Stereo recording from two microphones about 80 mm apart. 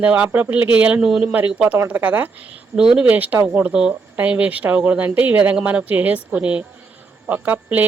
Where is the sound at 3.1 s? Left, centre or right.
Right.